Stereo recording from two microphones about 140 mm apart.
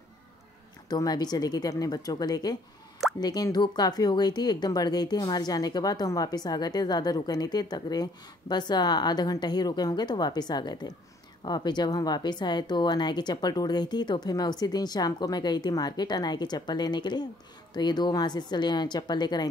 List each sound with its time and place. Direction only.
0.8 s speech: 30° left (ahead or behind)